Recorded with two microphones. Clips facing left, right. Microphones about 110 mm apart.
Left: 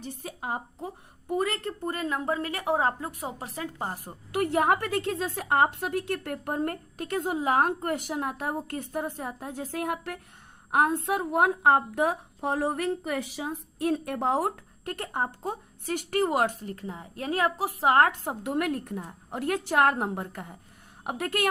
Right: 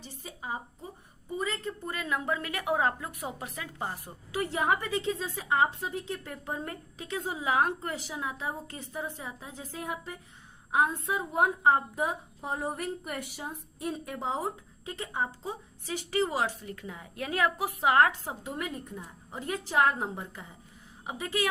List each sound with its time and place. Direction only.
0.0 s a woman's voice: 60° left (ahead or behind)
1.9 s a woman's voice: 40° left (ahead or behind)
18.4 s a woman's voice: 70° left (ahead or behind)